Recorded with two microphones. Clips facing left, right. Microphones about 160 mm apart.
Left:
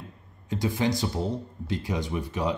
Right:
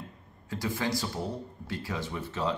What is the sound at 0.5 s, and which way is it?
Speech, 20° left (ahead or behind).